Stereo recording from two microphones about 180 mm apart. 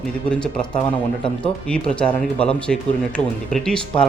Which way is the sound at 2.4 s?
5° left (ahead or behind).